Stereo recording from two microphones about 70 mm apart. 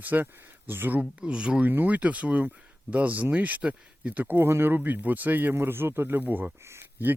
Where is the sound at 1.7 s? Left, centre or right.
Right.